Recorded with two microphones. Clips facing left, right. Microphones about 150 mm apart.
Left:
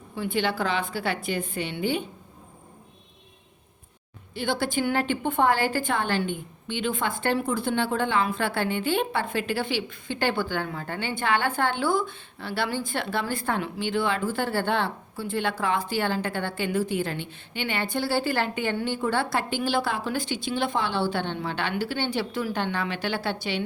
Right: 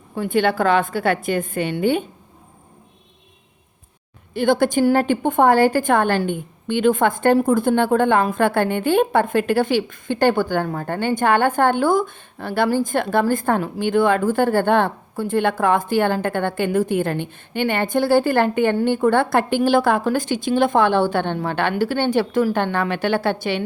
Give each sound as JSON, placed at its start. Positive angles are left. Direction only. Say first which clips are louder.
{"t": 0.2, "sound": "a woman's voice", "louder": "right 8 dB", "side_deg": -50}
{"t": 4.4, "sound": "a woman's voice", "louder": "right 10 dB", "side_deg": -50}